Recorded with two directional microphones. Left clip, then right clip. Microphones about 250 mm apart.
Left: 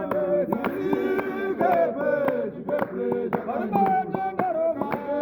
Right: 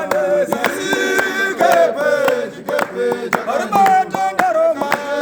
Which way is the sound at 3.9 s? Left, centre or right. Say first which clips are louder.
Right 10 dB; right.